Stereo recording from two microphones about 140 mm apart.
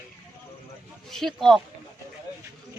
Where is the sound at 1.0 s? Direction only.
Centre (ahead or behind).